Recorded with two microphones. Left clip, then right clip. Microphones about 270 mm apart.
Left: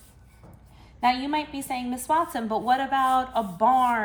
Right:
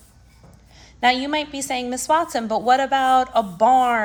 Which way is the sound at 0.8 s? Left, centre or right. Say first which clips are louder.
Right 5 dB; right.